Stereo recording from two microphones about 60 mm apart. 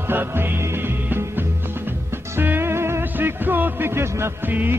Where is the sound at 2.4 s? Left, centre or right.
Right.